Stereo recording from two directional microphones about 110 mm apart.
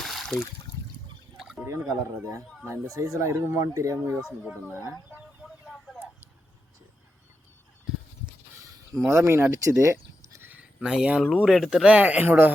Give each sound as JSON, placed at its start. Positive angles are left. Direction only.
{"t": 0.0, "sound": "water", "side_deg": 0}
{"t": 1.4, "sound": "drip", "side_deg": -5}
{"t": 1.6, "sound": "speech", "side_deg": -25}
{"t": 5.7, "sound": "a sound", "side_deg": 0}
{"t": 8.7, "sound": "sheep", "side_deg": -25}
{"t": 10.8, "sound": "speech", "side_deg": -5}